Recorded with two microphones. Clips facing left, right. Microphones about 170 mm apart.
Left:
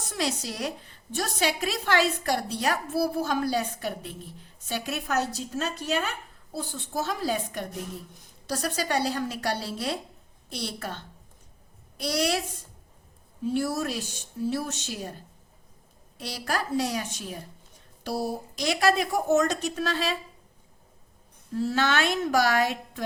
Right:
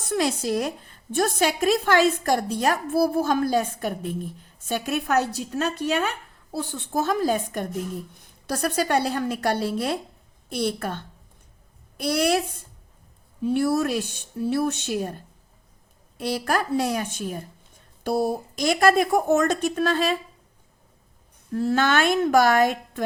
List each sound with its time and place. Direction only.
0.0 s a woman's voice: 55° right (ahead or behind)
13.4 s a woman's voice: 60° right (ahead or behind)
16.1 s a woman's voice: 55° right (ahead or behind)
21.5 s a woman's voice: 55° right (ahead or behind)